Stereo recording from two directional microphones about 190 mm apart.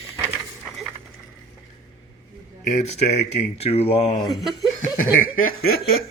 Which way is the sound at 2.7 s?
35° left (ahead or behind).